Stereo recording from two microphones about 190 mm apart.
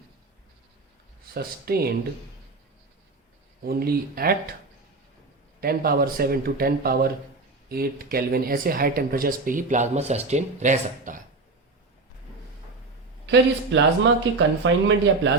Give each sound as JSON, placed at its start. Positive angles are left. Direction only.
{"t": 1.3, "sound": "speech", "side_deg": -55}
{"t": 3.6, "sound": "speech", "side_deg": -55}
{"t": 5.5, "sound": "speech", "side_deg": -50}
{"t": 13.2, "sound": "speech", "side_deg": -70}